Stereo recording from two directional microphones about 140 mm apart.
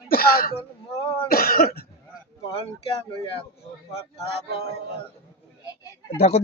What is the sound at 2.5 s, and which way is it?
Speech, 40° left (ahead or behind).